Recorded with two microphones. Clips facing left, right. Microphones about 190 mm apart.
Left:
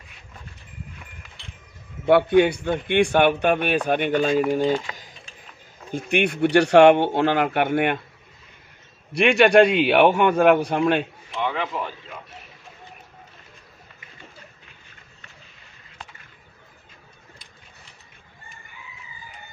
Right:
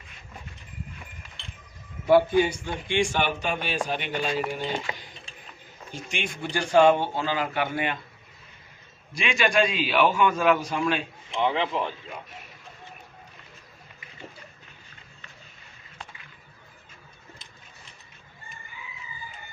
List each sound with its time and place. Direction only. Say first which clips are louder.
2.0 s a man's voice: left 3 dB; 65° left (ahead or behind); by 4.7 s 45° left (ahead or behind)
5.9 s a man's voice: left 11 dB; 55° left (ahead or behind)
9.1 s a man's voice: left 9 dB; 65° left (ahead or behind)
11.3 s a man's voice: right 1 dB; 20° right (ahead or behind)